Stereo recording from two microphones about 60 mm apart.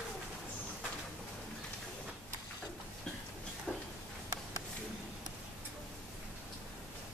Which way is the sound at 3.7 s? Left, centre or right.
Left.